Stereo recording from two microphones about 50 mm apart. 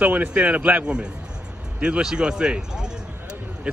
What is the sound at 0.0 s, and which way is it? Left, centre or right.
Speech, right.